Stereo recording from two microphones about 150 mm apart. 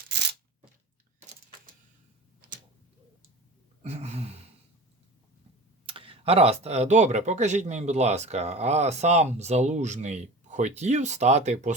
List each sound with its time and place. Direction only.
3.8 s speech: 45° right (ahead or behind)
5.8 s speech: 35° right (ahead or behind)